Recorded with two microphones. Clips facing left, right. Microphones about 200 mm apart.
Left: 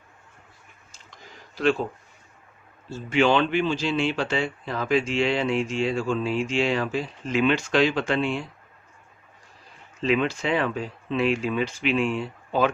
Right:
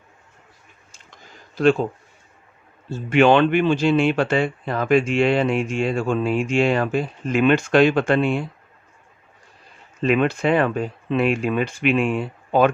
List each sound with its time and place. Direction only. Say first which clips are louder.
3.1 s speech: right 6 dB; 60° right (ahead or behind)
10.0 s speech: right 5 dB; 55° right (ahead or behind)